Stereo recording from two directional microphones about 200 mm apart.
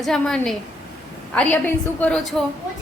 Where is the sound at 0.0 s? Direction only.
Centre (ahead or behind).